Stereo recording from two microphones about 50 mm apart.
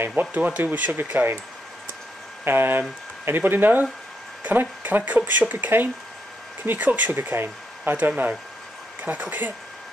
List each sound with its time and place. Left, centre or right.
0.1 s speech: right
2.4 s speech: right